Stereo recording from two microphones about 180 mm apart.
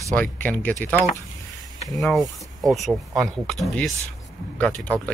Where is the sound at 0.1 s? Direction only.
10° left (ahead or behind).